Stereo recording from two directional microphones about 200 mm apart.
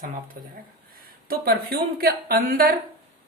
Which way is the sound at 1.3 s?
50° right (ahead or behind).